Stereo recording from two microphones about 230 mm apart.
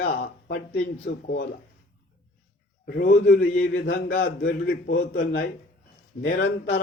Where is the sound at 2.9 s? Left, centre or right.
Left.